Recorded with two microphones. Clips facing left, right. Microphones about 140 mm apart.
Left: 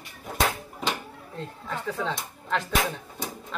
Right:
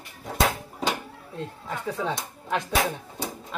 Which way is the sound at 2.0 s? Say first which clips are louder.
Right 1 dB; 15° right (ahead or behind).